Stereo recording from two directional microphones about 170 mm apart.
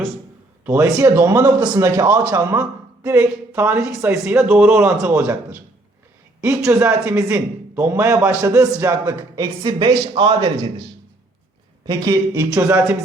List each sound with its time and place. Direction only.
0.6 s a man's voice: 10° right (ahead or behind); by 10.7 s 25° right (ahead or behind)
11.9 s speech: 25° right (ahead or behind)